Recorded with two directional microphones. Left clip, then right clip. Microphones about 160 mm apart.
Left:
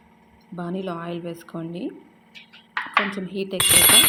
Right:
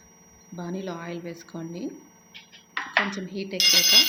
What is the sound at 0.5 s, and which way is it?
A woman's voice, 15° left (ahead or behind).